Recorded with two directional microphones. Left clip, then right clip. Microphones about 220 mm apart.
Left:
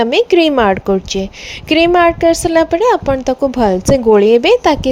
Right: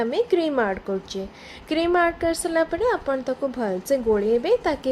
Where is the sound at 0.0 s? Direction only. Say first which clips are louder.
Left 11 dB; 35° left (ahead or behind).